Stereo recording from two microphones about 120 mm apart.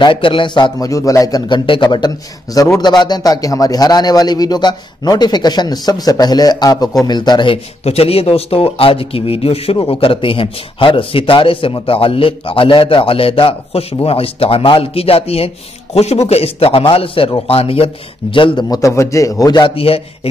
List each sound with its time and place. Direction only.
0.0 s speech: 45° left (ahead or behind)
0.7 s a man's voice: 30° left (ahead or behind); by 18.7 s 45° left (ahead or behind)
18.7 s a man's voice: 25° left (ahead or behind); by 20.0 s 50° left (ahead or behind)